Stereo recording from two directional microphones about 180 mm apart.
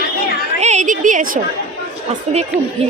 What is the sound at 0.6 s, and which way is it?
Speech, 40° right (ahead or behind).